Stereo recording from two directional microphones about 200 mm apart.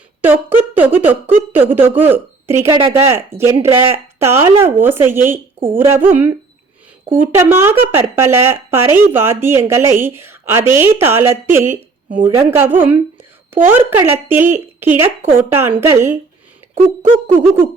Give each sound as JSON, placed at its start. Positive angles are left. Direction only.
{"t": 0.2, "sound": "a woman's voice", "side_deg": -10}
{"t": 2.6, "sound": "speech", "side_deg": -20}
{"t": 2.9, "sound": "speech", "side_deg": -10}
{"t": 7.3, "sound": "speech", "side_deg": -10}